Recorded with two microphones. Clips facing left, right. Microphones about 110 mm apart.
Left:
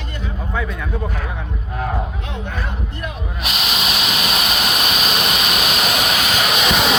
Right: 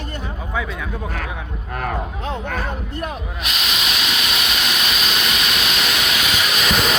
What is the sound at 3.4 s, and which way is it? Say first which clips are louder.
Steam: left 3 dB; 35° left (ahead or behind).